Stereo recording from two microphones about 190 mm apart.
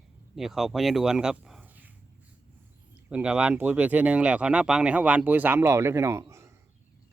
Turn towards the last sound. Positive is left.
turn(degrees=-15)  # may be behind; listen again after turning